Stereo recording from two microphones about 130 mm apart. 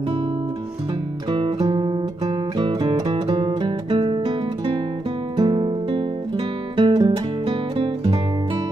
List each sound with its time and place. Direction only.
1.3 s music: 35° right (ahead or behind)
4.0 s guitar: 45° right (ahead or behind)
5.4 s music: 40° right (ahead or behind)